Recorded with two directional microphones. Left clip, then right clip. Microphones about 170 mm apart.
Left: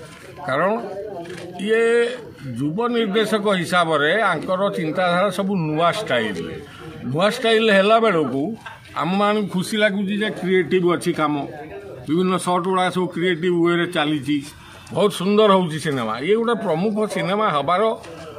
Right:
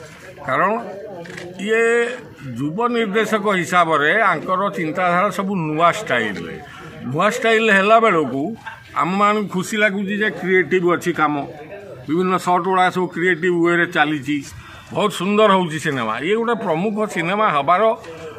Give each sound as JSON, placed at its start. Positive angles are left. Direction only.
{"t": 0.5, "sound": "speech", "side_deg": 15}